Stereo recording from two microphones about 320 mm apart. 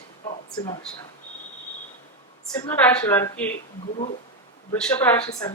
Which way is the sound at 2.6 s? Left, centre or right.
Centre.